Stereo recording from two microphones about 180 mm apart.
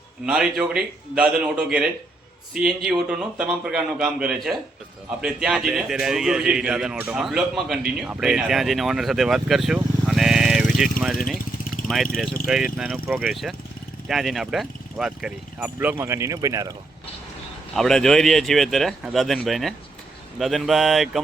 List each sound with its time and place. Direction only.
0.3 s a man's voice: 5° right (ahead or behind)
11.8 s vehicle: 50° left (ahead or behind)
12.5 s a man's voice: 5° right (ahead or behind); by 16.7 s 20° right (ahead or behind)
17.7 s a man's voice: 5° left (ahead or behind)